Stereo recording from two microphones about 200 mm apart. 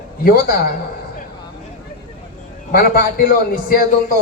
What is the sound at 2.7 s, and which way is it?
A man's voice, 50° left (ahead or behind).